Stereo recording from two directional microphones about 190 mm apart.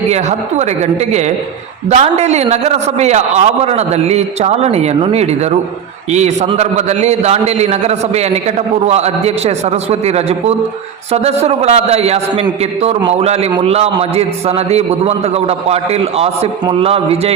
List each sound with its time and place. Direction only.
0.1 s a man's voice: 35° right (ahead or behind)